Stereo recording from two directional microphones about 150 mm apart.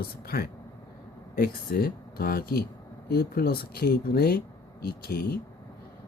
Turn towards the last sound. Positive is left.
turn(degrees=90)